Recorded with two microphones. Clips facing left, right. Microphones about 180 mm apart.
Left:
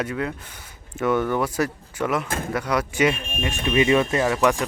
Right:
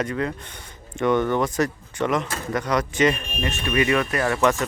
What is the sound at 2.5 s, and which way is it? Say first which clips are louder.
Speech: right 2 dB; 10° left (ahead or behind).